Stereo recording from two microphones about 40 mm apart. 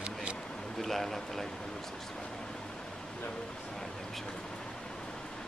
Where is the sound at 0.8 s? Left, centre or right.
Centre.